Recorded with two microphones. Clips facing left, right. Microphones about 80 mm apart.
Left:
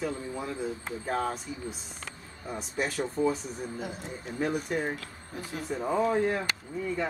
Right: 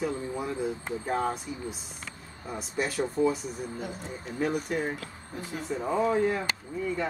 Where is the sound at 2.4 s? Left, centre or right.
Centre.